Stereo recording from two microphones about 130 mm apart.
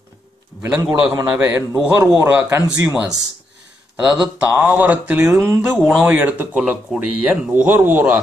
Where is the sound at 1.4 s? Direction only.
15° right (ahead or behind).